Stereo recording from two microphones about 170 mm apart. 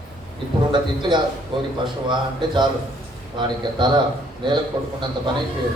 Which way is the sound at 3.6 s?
25° right (ahead or behind).